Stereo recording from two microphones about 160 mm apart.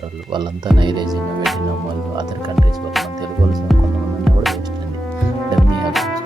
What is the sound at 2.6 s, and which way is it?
Music, centre (ahead or behind).